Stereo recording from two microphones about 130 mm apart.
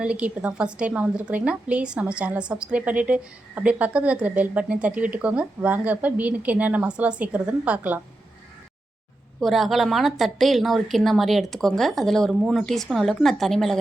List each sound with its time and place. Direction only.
0.0 s a woman's voice: 10° right (ahead or behind)
9.4 s a woman's voice: centre (ahead or behind)